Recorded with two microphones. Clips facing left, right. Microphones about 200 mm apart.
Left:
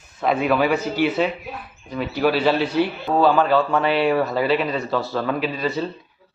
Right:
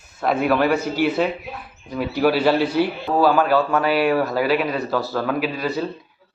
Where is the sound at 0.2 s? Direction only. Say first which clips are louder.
Even; 5° right (ahead or behind).